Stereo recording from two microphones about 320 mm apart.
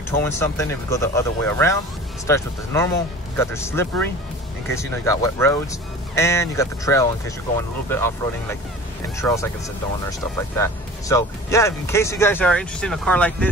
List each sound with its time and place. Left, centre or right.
0.1 s speech: centre